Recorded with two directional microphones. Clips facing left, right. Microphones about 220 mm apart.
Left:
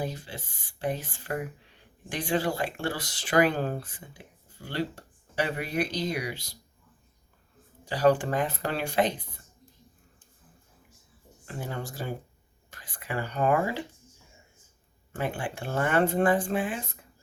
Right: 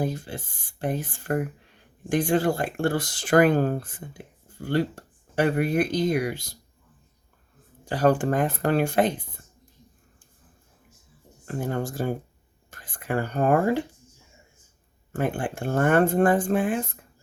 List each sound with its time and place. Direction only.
0.0 s speech: 50° right (ahead or behind)
7.9 s speech: 50° right (ahead or behind)
11.4 s speech: 50° right (ahead or behind)
15.1 s speech: 50° right (ahead or behind)